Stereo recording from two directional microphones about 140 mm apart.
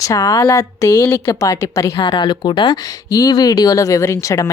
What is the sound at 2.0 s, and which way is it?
Speech, 35° left (ahead or behind).